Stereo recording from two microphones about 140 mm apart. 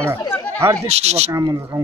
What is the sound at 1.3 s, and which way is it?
Speech, 25° right (ahead or behind).